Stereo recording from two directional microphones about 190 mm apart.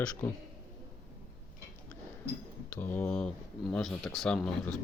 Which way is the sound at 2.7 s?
10° left (ahead or behind).